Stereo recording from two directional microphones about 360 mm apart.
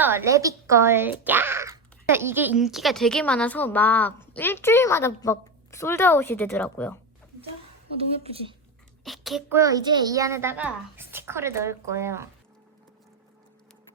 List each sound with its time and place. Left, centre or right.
0.0 s speech: centre
7.9 s a child's voice: centre
9.0 s a child's voice: centre